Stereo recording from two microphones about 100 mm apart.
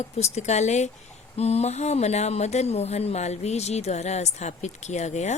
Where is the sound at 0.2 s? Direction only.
90° left.